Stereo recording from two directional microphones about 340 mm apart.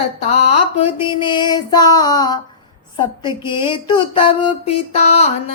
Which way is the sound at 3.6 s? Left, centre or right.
Centre.